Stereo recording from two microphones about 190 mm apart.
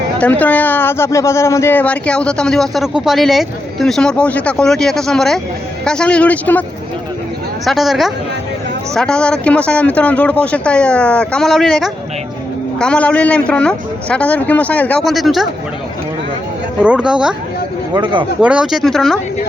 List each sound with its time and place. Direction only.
0.2 s speech: 10° left (ahead or behind)
16.8 s speech: 5° right (ahead or behind)
17.9 s speech: 25° right (ahead or behind)
18.3 s speech: 5° right (ahead or behind)